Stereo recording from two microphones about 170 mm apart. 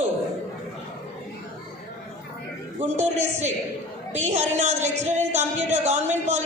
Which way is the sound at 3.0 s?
40° right (ahead or behind).